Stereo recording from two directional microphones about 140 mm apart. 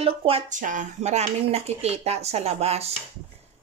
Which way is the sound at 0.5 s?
65° right (ahead or behind).